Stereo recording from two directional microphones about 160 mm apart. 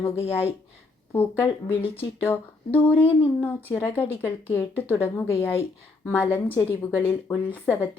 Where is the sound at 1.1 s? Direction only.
15° left (ahead or behind).